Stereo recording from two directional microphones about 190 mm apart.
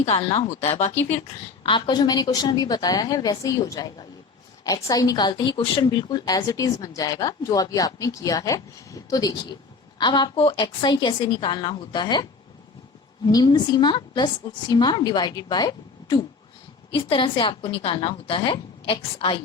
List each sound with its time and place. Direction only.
0.0 s speech: 35° left (ahead or behind)
1.6 s a woman's voice: 25° left (ahead or behind)